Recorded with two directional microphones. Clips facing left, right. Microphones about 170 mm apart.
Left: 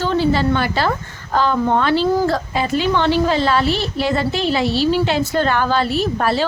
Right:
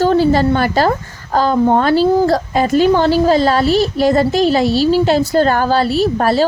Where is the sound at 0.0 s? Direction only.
45° right (ahead or behind).